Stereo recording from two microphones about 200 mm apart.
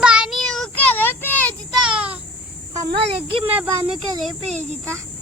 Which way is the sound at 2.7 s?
25° right (ahead or behind).